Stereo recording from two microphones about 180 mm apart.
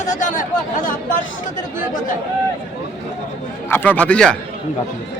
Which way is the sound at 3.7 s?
10° left (ahead or behind).